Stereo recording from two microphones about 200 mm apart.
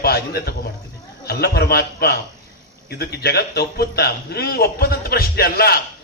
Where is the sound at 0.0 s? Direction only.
50° left (ahead or behind).